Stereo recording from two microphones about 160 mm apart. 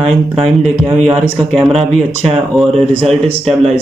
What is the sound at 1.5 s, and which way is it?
Speech, centre (ahead or behind).